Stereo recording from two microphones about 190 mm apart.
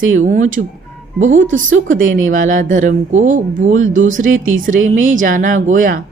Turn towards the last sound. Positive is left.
turn(degrees=-45)  # may be behind; listen again after turning